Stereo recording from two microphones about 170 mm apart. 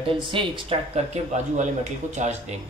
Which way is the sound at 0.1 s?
30° right (ahead or behind).